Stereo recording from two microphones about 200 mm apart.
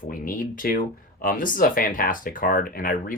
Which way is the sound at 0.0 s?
45° left (ahead or behind).